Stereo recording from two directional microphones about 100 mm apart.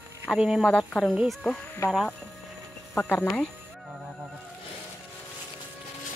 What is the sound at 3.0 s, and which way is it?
Speech, 20° left (ahead or behind).